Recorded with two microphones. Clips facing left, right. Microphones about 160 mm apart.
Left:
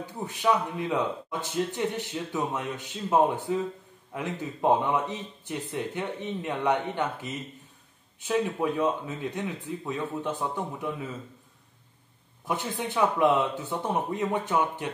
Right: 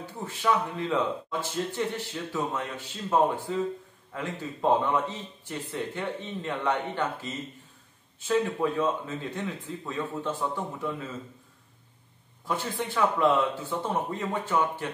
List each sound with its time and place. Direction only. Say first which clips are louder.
0.0 s a man's voice: left 2 dB; 15° left (ahead or behind)
12.4 s a man's voice: even; 15° left (ahead or behind)